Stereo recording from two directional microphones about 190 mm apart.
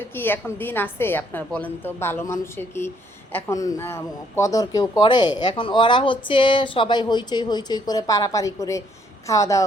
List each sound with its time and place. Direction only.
0.0 s a woman's voice: 10° left (ahead or behind)